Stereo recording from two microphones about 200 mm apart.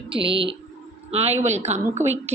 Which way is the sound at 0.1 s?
25° right (ahead or behind).